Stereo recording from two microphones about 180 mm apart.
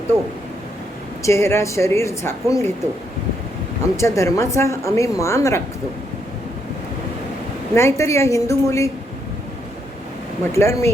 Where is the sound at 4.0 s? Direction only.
15° left (ahead or behind).